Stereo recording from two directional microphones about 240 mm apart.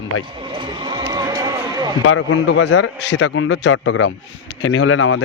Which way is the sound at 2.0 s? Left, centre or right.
Left.